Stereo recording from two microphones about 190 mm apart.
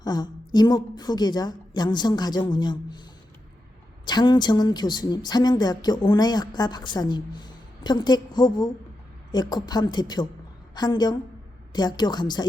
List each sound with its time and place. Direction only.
0.0 s a woman's voice: 20° left (ahead or behind)
4.0 s a woman's voice: 20° left (ahead or behind)